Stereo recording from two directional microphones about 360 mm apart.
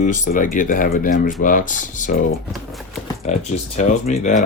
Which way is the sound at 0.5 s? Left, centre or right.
Left.